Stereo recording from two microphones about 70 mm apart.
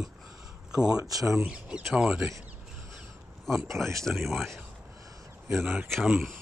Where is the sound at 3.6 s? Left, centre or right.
Right.